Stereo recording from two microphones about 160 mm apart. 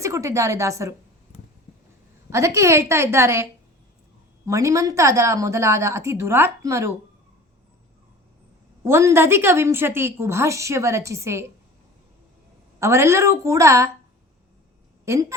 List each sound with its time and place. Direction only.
0.0 s a woman's voice: 20° right (ahead or behind)
2.3 s a woman's voice: 20° right (ahead or behind)
4.4 s a woman's voice: 20° right (ahead or behind)
8.8 s a woman's voice: 15° right (ahead or behind)
12.8 s a woman's voice: 15° right (ahead or behind)
15.0 s a woman's voice: 20° right (ahead or behind)